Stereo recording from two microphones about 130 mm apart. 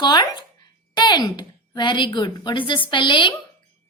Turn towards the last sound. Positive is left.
turn(degrees=40)  # may be behind; listen again after turning